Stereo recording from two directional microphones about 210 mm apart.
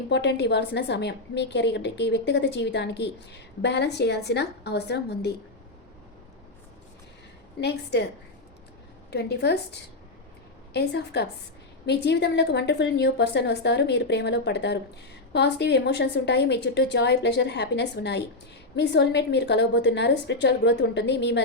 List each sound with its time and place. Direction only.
0.1 s a woman's voice: 55° left (ahead or behind)
7.6 s a woman's voice: 50° left (ahead or behind)
9.0 s a woman's voice: 50° left (ahead or behind)